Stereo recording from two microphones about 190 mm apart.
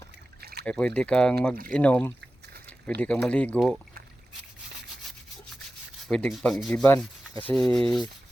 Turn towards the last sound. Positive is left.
turn(degrees=5)  # may be behind; listen again after turning